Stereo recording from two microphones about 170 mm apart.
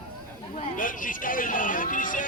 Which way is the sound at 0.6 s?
55° left (ahead or behind).